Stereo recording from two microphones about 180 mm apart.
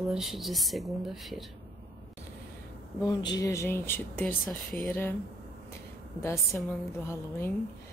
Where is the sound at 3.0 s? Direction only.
20° left (ahead or behind).